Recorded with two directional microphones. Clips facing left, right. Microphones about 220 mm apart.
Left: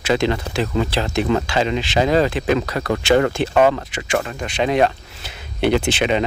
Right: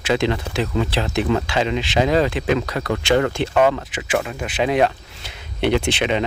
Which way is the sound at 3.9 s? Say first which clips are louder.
Even; 5° right (ahead or behind).